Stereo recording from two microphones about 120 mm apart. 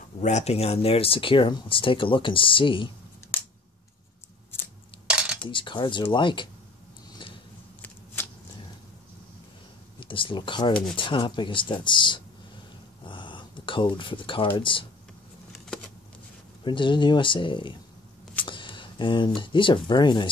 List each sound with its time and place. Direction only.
0.2 s speech: 70° left (ahead or behind); by 2.9 s 45° left (ahead or behind)
5.0 s cutlery: 10° right (ahead or behind)
5.5 s speech: 45° left (ahead or behind)
9.9 s speech: 45° left (ahead or behind)
13.0 s a sound: 45° left (ahead or behind)
14.6 s speech: 45° left (ahead or behind)
16.6 s speech: 40° left (ahead or behind)